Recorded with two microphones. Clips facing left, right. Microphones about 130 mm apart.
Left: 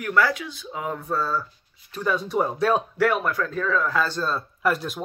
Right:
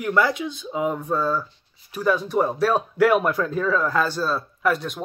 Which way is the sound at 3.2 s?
20° right (ahead or behind).